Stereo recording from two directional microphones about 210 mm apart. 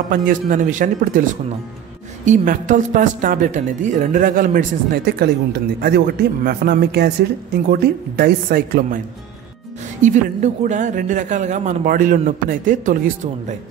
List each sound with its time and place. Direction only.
0.1 s a woman's voice: 40° right (ahead or behind)
10.0 s a woman's voice: 35° right (ahead or behind)